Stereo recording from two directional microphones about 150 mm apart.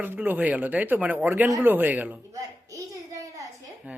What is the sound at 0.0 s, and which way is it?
Speech, 10° right (ahead or behind).